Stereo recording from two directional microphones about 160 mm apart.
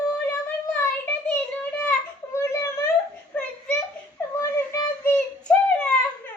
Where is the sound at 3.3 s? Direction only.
10° left (ahead or behind).